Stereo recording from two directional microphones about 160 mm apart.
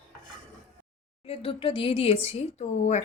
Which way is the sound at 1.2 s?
35° left (ahead or behind).